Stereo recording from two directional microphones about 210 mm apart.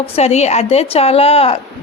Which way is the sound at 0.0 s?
30° left (ahead or behind).